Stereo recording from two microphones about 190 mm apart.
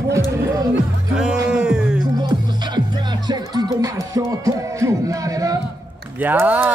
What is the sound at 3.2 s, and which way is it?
Music, 20° right (ahead or behind).